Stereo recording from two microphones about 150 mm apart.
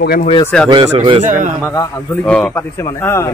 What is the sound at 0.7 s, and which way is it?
Speech, 35° right (ahead or behind).